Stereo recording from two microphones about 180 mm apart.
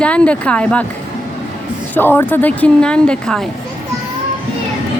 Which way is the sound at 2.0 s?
10° left (ahead or behind).